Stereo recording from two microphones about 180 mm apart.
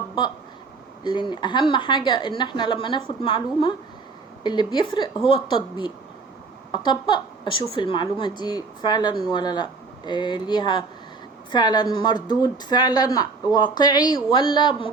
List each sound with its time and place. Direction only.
1.0 s a woman's voice: 25° left (ahead or behind)